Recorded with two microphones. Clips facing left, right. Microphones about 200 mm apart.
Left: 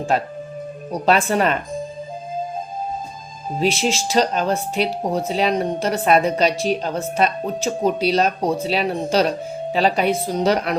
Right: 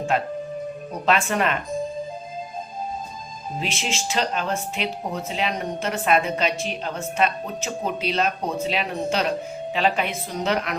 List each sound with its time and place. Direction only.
1.0 s a woman's voice: 35° left (ahead or behind)
3.6 s a woman's voice: 35° left (ahead or behind)